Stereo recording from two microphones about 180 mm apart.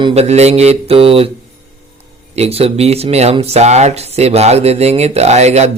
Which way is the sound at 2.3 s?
35° right (ahead or behind).